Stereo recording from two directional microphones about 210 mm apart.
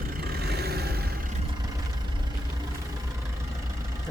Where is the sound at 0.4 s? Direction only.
50° right (ahead or behind).